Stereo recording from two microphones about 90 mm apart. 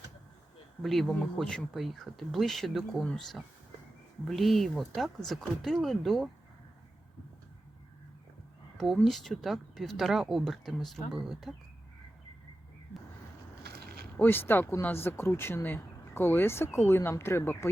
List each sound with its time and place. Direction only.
0.8 s speech: centre (ahead or behind)
9.0 s speech: centre (ahead or behind)
14.2 s speech: 25° left (ahead or behind)